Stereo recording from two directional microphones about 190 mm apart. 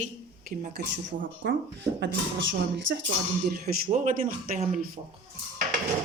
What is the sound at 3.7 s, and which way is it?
Speech, 40° right (ahead or behind).